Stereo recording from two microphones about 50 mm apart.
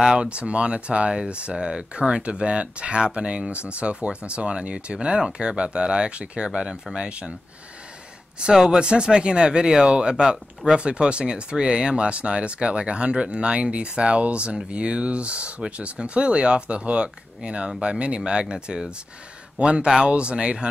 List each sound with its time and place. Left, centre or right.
0.0 s speech: centre
7.1 s speech: right
8.4 s speech: centre